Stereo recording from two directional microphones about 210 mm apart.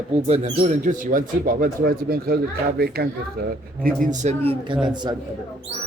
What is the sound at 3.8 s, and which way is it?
Speech, 35° right (ahead or behind).